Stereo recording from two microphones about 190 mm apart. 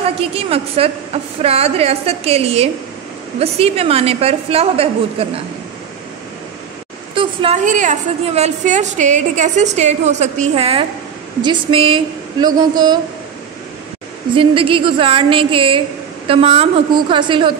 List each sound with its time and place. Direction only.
0.2 s a woman's voice: 30° right (ahead or behind)
7.2 s speech: 25° right (ahead or behind)
7.6 s a woman's voice: 40° right (ahead or behind); by 13.0 s 20° right (ahead or behind)
14.3 s speech: 25° right (ahead or behind)